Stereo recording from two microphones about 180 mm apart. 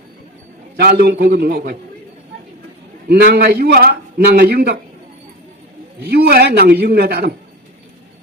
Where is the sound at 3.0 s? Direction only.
60° right (ahead or behind).